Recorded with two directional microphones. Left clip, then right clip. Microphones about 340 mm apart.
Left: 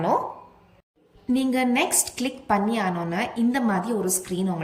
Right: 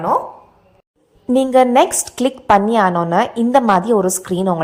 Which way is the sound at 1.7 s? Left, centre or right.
Centre.